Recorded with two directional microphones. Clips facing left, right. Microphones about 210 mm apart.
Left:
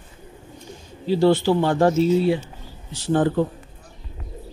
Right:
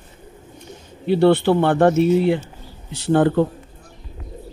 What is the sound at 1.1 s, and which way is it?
Speech, 60° right (ahead or behind).